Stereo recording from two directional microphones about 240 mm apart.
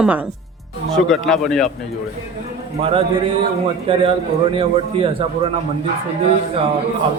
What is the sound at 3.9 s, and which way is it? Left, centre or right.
A man's voice, right.